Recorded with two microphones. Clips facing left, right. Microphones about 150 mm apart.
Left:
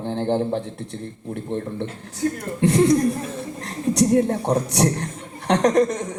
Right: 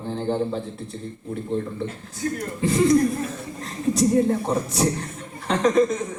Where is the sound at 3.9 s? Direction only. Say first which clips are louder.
Left 1 dB; 70° left (ahead or behind).